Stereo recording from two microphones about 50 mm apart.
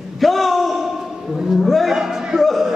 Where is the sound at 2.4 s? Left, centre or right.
Centre.